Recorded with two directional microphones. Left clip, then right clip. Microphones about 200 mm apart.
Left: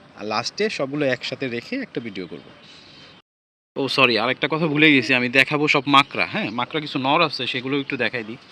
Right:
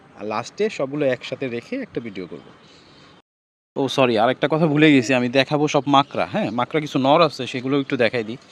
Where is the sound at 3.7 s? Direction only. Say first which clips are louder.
Even; 35° right (ahead or behind); by 8.3 s 60° right (ahead or behind).